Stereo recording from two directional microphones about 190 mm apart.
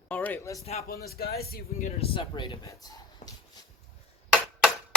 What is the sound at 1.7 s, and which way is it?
Speech, 35° left (ahead or behind).